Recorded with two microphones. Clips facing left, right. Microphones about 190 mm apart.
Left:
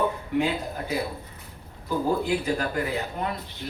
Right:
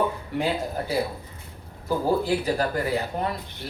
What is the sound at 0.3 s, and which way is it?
Speech, 35° right (ahead or behind).